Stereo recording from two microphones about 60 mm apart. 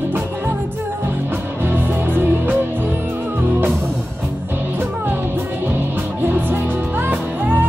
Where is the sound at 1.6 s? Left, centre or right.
Right.